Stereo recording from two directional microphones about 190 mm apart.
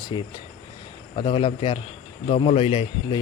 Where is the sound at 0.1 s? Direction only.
25° left (ahead or behind).